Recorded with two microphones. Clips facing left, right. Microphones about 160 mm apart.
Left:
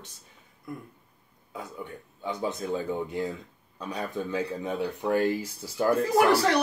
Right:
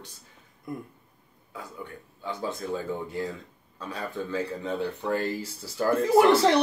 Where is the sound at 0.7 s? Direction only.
20° right (ahead or behind).